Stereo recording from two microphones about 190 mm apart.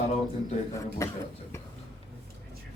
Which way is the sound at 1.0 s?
15° left (ahead or behind).